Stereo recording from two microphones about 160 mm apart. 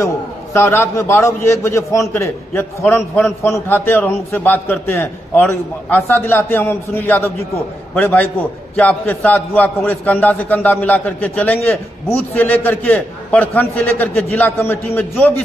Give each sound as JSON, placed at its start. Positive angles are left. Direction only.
{"t": 0.0, "sound": "a man's voice", "side_deg": 15}